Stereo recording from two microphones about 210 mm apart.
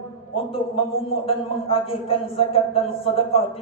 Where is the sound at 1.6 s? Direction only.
25° left (ahead or behind).